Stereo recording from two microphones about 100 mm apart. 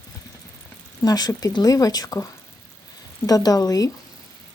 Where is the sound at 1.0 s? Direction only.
40° left (ahead or behind).